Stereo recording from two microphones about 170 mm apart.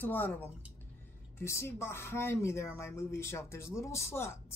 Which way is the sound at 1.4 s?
15° left (ahead or behind).